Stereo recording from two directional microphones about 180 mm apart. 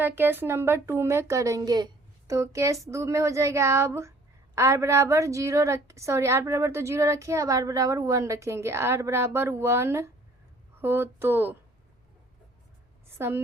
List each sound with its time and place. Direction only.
0.0 s a woman's voice: 10° right (ahead or behind)
13.1 s a woman's voice: 10° right (ahead or behind)